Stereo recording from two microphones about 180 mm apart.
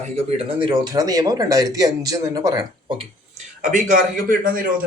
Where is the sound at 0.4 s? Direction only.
25° right (ahead or behind).